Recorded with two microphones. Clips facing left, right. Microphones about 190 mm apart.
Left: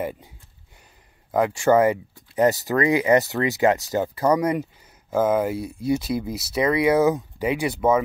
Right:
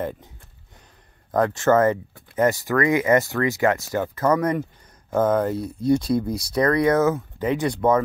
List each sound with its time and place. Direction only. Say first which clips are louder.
0.0 s speech: even; 10° left (ahead or behind)
1.3 s speech: even; 10° left (ahead or behind)